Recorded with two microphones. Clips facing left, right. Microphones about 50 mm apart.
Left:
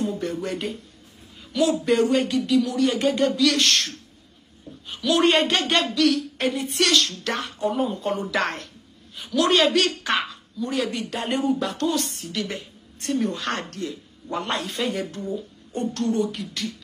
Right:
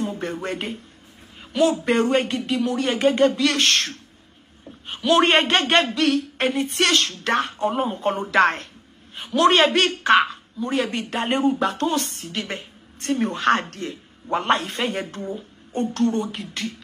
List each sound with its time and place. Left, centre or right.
0.0 s a woman's voice: right